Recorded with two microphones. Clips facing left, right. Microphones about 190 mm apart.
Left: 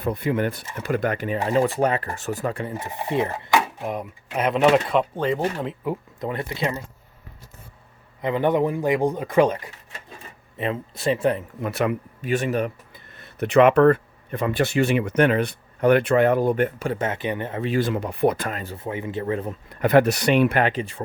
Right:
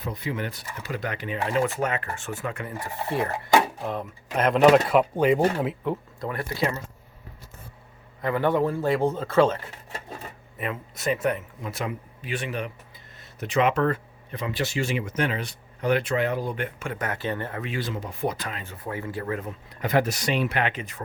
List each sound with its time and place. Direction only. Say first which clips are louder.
0.0 s a man's voice: left 8 dB; 55° left (ahead or behind); by 4.6 s 5° left (ahead or behind)
4.7 s speech: right 1 dB; 5° right (ahead or behind)
6.1 s speech: left 1 dB; 20° left (ahead or behind)
8.2 s a man's voice: left 2 dB; 20° left (ahead or behind)
10.6 s speech: left 5 dB; 30° left (ahead or behind)
11.6 s speech: left 11 dB; 65° left (ahead or behind)
12.2 s speech: left 8 dB; 45° left (ahead or behind)
13.1 s speech: left 8 dB; 60° left (ahead or behind); by 17.6 s 15° left (ahead or behind)
17.7 s speech: left 11 dB; 60° left (ahead or behind)
18.6 s speech: left 7 dB; 35° left (ahead or behind)
18.9 s speech: left 4 dB; 20° left (ahead or behind)
19.8 s speech: left 7 dB; 60° left (ahead or behind); by 21.0 s 30° left (ahead or behind)